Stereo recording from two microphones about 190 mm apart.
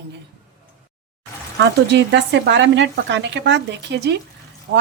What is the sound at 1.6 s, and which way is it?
A woman's voice, 65° right (ahead or behind).